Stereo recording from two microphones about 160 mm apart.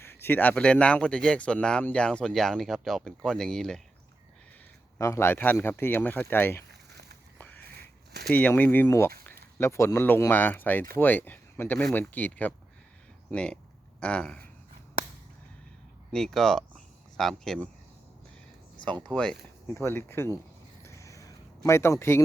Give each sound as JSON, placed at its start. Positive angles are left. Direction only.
{"t": 0.0, "sound": "speech", "side_deg": 15}
{"t": 4.9, "sound": "speech", "side_deg": 20}
{"t": 6.7, "sound": "a sound", "side_deg": -90}
{"t": 7.3, "sound": "a sound", "side_deg": 10}
{"t": 8.3, "sound": "speech", "side_deg": 10}
{"t": 16.1, "sound": "speech", "side_deg": 0}
{"t": 19.0, "sound": "speech", "side_deg": 5}
{"t": 19.7, "sound": "speech", "side_deg": 15}
{"t": 20.8, "sound": "a sound", "side_deg": 20}